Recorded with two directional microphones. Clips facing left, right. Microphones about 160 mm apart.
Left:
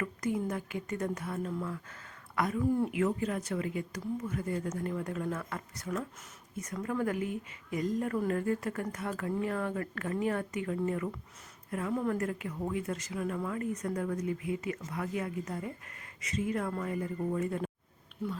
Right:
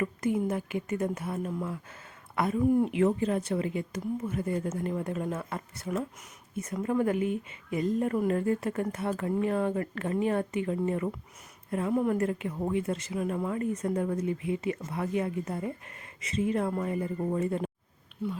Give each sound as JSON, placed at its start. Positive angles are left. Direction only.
{"t": 0.0, "sound": "a woman's voice", "side_deg": -20}